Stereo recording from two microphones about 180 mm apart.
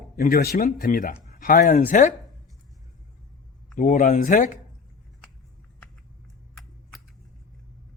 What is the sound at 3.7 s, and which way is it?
Speech, 45° left (ahead or behind).